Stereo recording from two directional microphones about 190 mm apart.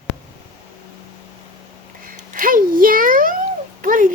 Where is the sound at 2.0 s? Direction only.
45° right (ahead or behind).